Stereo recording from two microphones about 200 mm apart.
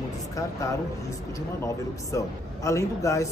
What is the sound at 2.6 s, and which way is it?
Speech, 15° left (ahead or behind).